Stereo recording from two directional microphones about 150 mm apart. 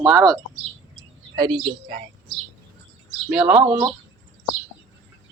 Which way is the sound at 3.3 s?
5° right (ahead or behind).